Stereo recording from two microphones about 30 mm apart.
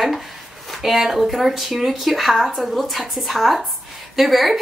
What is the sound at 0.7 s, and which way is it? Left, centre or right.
Speech, centre.